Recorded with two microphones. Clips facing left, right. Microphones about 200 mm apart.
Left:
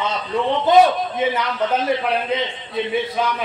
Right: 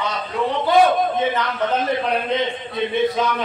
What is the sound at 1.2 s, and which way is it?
Speech, 10° left (ahead or behind).